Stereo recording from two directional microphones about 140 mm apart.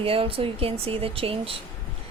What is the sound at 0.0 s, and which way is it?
A woman's voice, 40° right (ahead or behind).